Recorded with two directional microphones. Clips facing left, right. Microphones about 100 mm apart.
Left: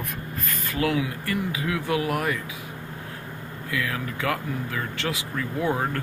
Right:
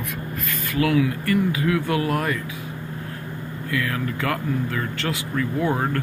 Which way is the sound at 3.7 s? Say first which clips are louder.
Right 3 dB; 10° left (ahead or behind).